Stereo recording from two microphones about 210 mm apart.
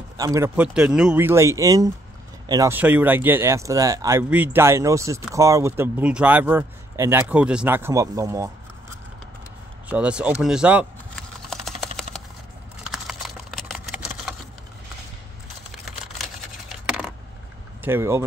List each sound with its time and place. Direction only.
0.2 s speech: 15° right (ahead or behind)
0.6 s speech: 5° right (ahead or behind)
9.8 s speech: 5° right (ahead or behind)
10.4 s typing: 5° right (ahead or behind)
12.9 s typing: centre (ahead or behind)
16.8 s coin: 5° right (ahead or behind)
17.8 s speech: 10° right (ahead or behind)